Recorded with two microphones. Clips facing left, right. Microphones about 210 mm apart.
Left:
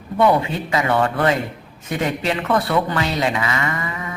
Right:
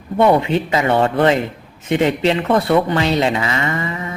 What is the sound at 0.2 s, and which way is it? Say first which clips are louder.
A woman's voice: right 3 dB; 25° right (ahead or behind).